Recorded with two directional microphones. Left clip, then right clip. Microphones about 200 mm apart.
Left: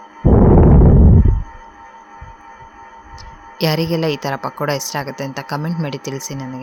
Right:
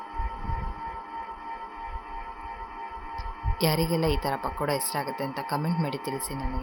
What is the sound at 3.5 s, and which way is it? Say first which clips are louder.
A woman's voice: left 8 dB; 25° left (ahead or behind).